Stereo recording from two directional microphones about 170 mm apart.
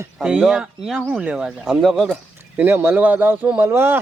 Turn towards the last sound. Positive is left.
turn(degrees=-10)  # may be behind; listen again after turning